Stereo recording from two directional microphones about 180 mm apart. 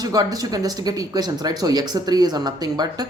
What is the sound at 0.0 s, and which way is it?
Speech, 20° right (ahead or behind).